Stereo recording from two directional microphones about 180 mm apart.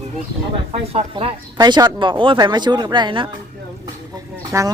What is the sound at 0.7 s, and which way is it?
Speech, 30° right (ahead or behind).